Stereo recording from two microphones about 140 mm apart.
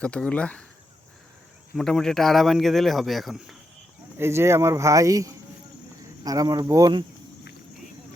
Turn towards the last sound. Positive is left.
turn(degrees=-25)  # may be behind; listen again after turning